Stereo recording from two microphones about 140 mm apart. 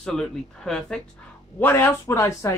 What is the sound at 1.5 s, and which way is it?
Speech, 15° left (ahead or behind).